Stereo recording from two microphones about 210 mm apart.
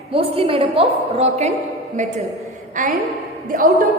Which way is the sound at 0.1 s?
25° right (ahead or behind).